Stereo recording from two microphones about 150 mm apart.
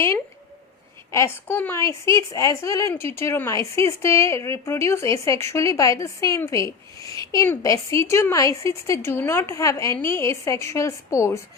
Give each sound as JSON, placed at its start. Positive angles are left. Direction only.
{"t": 1.1, "sound": "a woman's voice", "side_deg": 15}